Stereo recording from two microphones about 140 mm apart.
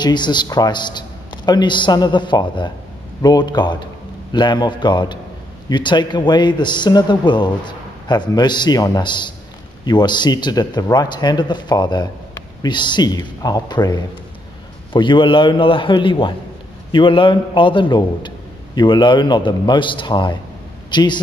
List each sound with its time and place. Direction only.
0.0 s speech: 30° left (ahead or behind)